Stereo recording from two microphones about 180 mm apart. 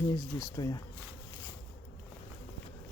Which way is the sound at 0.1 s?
20° left (ahead or behind).